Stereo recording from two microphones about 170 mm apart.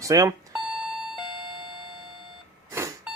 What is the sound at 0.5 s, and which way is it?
Alarm clock, 5° right (ahead or behind).